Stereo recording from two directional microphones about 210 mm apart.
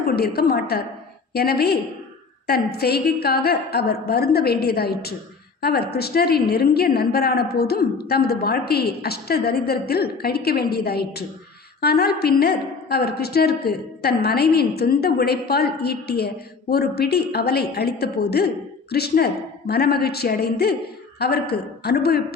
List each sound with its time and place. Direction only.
0.0 s a woman's voice: 45° left (ahead or behind)